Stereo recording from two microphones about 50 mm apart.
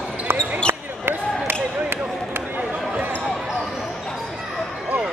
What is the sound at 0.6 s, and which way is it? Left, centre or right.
Basketball bounce, right.